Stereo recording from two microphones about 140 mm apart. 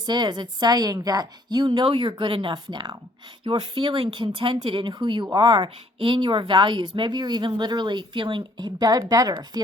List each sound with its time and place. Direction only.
0.0 s speech: 35° right (ahead or behind)